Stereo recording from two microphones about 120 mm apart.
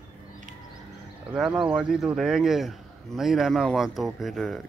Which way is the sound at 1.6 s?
5° right (ahead or behind).